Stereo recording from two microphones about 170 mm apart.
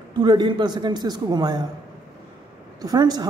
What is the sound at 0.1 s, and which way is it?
A man's voice, 25° right (ahead or behind).